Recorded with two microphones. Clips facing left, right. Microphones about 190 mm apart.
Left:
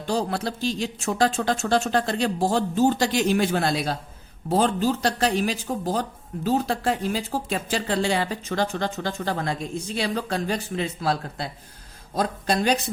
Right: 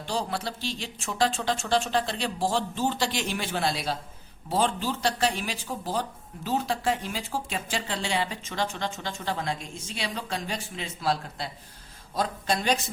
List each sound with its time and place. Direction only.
0.0 s speech: 45° left (ahead or behind)
9.8 s a woman's voice: 40° left (ahead or behind)